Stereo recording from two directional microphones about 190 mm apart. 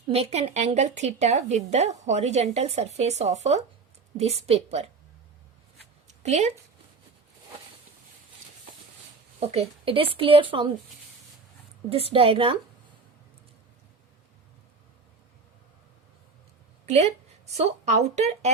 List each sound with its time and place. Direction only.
0.1 s speech: 35° right (ahead or behind)
6.1 s a sound: 35° right (ahead or behind)
9.5 s speech: 30° right (ahead or behind)
11.9 s speech: 30° right (ahead or behind)
16.8 s a woman's voice: 35° right (ahead or behind)